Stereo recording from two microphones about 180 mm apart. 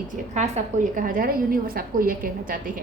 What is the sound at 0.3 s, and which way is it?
A woman's voice, 45° right (ahead or behind).